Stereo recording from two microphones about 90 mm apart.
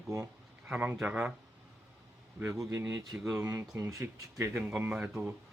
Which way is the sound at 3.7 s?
40° right (ahead or behind).